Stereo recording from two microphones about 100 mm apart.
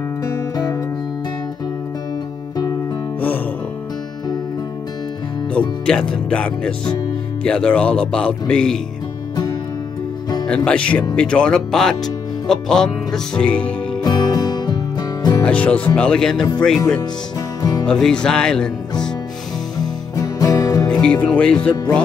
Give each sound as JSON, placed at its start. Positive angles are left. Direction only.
{"t": 0.2, "sound": "music", "side_deg": 35}
{"t": 2.5, "sound": "music", "side_deg": 35}
{"t": 5.9, "sound": "speech", "side_deg": 10}
{"t": 9.3, "sound": "music", "side_deg": 40}
{"t": 10.4, "sound": "speech", "side_deg": 10}
{"t": 12.4, "sound": "music", "side_deg": 5}
{"t": 14.0, "sound": "music", "side_deg": 45}
{"t": 15.4, "sound": "speech", "side_deg": 15}
{"t": 17.6, "sound": "music", "side_deg": 40}
{"t": 17.8, "sound": "music", "side_deg": 5}
{"t": 19.8, "sound": "music", "side_deg": 40}
{"t": 20.9, "sound": "music", "side_deg": 10}
{"t": 21.3, "sound": "speech", "side_deg": 10}